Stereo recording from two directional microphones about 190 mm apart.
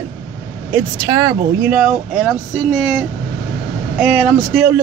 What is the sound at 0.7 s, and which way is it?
Speech, 15° right (ahead or behind).